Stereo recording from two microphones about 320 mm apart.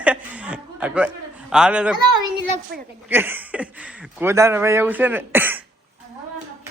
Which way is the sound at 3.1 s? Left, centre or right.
Centre.